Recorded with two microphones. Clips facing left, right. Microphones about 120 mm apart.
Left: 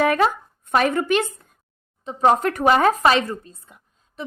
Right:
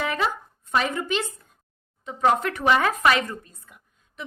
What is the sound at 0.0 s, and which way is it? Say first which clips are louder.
Speech: left 7 dB; 55° left (ahead or behind).